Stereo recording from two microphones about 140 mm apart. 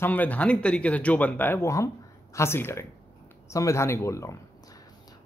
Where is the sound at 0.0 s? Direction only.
10° left (ahead or behind).